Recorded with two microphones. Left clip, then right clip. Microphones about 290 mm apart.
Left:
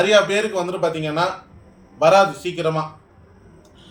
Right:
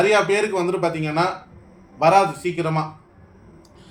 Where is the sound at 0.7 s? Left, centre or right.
Right.